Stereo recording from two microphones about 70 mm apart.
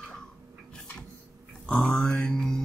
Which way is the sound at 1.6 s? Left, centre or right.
Centre.